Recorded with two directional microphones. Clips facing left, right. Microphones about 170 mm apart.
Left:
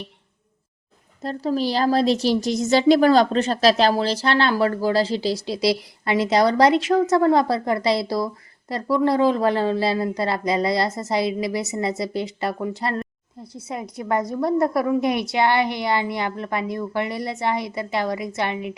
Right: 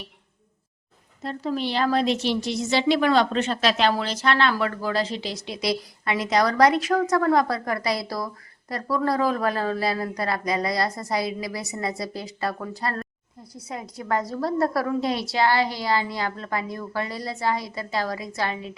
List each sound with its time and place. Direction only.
1.2 s a woman's voice: 35° left (ahead or behind); by 18.8 s 20° left (ahead or behind)